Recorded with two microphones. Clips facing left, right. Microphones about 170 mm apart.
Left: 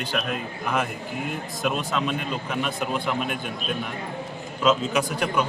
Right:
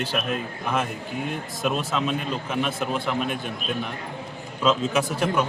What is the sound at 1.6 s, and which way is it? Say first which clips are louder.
A man's voice: right 1 dB; centre (ahead or behind).